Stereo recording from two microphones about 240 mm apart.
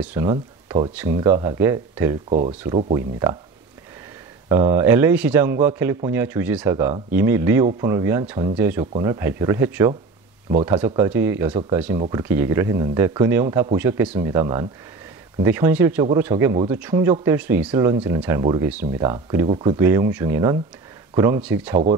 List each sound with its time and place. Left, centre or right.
0.0 s speech: centre
2.2 s speech: right
2.9 s speech: centre
4.5 s speech: centre